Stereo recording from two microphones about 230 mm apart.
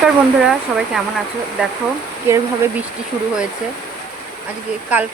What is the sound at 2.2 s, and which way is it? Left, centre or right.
Speech, centre.